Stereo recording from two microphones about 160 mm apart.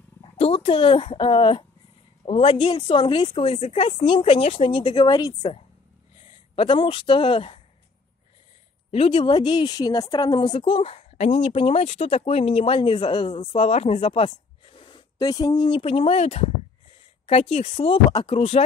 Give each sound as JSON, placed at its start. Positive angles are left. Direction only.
{"t": 0.2, "sound": "a woman's voice", "side_deg": 35}
{"t": 6.5, "sound": "a woman's voice", "side_deg": 35}
{"t": 8.9, "sound": "a woman's voice", "side_deg": 35}
{"t": 13.7, "sound": "a woman's voice", "side_deg": 40}